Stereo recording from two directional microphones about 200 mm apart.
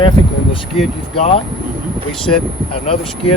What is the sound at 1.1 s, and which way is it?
Speech, 30° left (ahead or behind).